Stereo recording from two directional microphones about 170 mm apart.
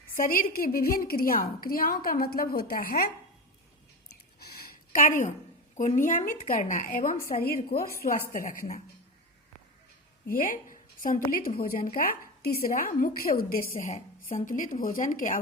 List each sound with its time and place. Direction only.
0.2 s a woman's voice: 55° left (ahead or behind)
4.4 s a sound: 65° left (ahead or behind)
5.7 s speech: 45° left (ahead or behind)
7.4 s a woman's voice: 60° left (ahead or behind)
10.2 s a woman's voice: 55° left (ahead or behind)